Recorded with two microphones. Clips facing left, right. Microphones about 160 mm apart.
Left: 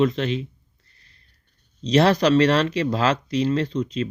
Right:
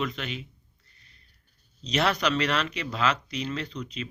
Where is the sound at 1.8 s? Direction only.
35° left (ahead or behind).